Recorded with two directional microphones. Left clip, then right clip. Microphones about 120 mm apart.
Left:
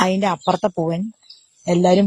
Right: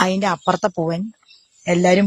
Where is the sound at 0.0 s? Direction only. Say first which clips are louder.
Even; 30° left (ahead or behind).